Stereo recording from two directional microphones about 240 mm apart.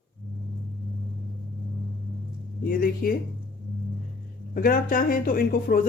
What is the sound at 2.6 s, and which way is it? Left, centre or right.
Speech, left.